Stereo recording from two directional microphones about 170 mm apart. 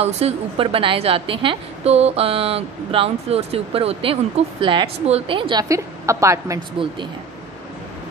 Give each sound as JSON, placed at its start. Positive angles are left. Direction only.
{"t": 0.0, "sound": "a woman's voice", "side_deg": -35}